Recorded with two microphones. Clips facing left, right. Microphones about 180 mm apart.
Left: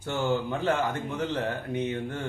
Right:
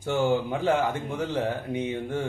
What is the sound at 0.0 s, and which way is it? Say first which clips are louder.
Speech: right 3 dB; 15° right (ahead or behind).